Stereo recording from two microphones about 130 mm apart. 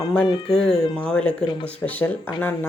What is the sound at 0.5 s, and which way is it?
Speech, 5° left (ahead or behind).